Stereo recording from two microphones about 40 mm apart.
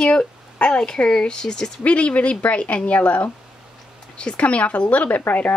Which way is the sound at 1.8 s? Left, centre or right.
Left.